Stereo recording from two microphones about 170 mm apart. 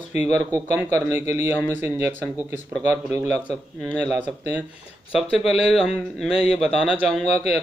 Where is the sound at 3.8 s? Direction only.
5° left (ahead or behind).